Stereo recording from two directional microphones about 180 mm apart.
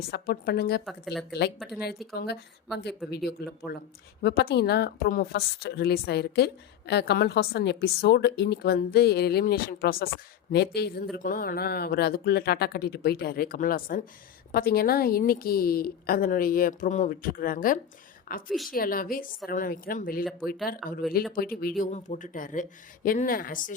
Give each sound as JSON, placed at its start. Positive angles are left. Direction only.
{"t": 0.1, "sound": "a woman's voice", "side_deg": 60}
{"t": 0.9, "sound": "speech", "side_deg": 0}
{"t": 1.3, "sound": "a woman's voice", "side_deg": 65}
{"t": 1.5, "sound": "speech", "side_deg": 0}
{"t": 2.1, "sound": "a woman's voice", "side_deg": 65}
{"t": 3.4, "sound": "a woman's voice", "side_deg": 65}
{"t": 10.5, "sound": "a woman's voice", "side_deg": 65}
{"t": 20.8, "sound": "speech", "side_deg": 0}
{"t": 21.3, "sound": "a woman's voice", "side_deg": 55}